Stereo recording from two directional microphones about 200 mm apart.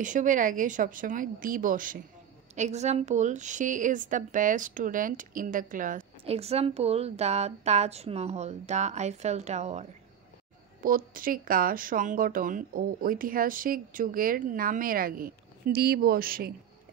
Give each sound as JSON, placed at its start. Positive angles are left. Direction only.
{"t": 0.0, "sound": "a woman's voice", "side_deg": -40}